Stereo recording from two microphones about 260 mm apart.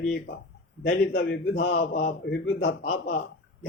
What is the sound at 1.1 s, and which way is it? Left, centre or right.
Speech, left.